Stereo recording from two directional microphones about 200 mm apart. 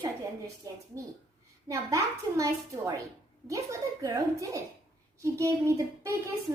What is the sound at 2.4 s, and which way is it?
A child's voice, 15° right (ahead or behind).